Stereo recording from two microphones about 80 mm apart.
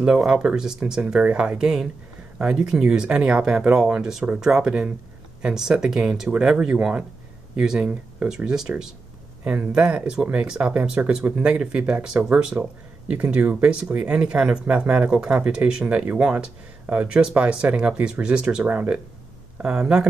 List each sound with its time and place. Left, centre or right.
0.0 s speech: centre
9.4 s speech: centre